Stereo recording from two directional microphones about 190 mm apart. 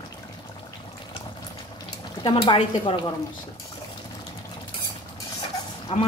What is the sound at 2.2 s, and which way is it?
Speech, 25° left (ahead or behind).